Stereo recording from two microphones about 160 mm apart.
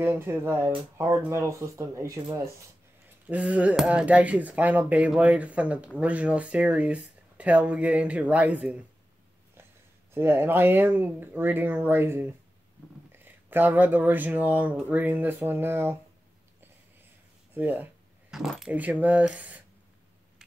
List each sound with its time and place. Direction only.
0.0 s speech: 15° right (ahead or behind)
3.3 s speech: 5° right (ahead or behind)
10.1 s speech: 15° right (ahead or behind)
17.6 s speech: 10° right (ahead or behind)